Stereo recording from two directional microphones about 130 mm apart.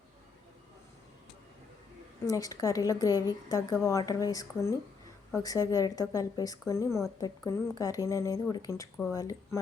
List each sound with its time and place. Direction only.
2.2 s a woman's voice: 25° left (ahead or behind)